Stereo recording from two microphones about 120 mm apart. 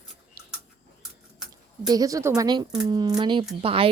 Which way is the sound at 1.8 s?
30° right (ahead or behind).